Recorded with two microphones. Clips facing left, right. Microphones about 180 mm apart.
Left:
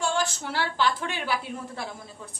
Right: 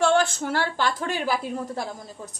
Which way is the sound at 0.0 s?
60° right (ahead or behind).